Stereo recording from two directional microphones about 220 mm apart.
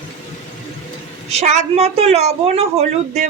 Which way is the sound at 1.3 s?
30° right (ahead or behind).